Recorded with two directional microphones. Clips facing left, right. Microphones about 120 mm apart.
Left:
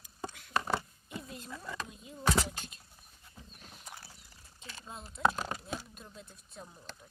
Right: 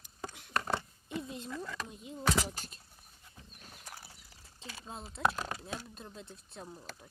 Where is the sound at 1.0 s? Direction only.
25° right (ahead or behind).